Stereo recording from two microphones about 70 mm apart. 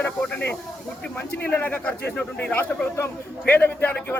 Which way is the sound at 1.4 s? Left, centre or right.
Left.